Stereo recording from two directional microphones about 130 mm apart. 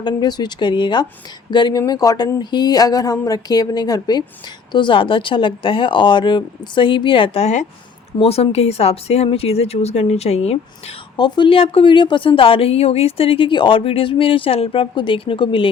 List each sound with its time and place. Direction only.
0.0 s a woman's voice: 35° left (ahead or behind); by 10.9 s 55° left (ahead or behind)
11.2 s a woman's voice: 40° left (ahead or behind)